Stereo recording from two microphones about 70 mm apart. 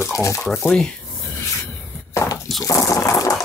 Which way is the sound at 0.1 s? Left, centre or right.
Left.